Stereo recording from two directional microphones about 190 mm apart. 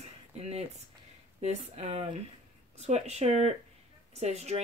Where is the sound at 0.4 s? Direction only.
35° right (ahead or behind).